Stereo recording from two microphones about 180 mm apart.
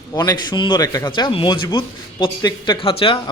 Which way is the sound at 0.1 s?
25° left (ahead or behind).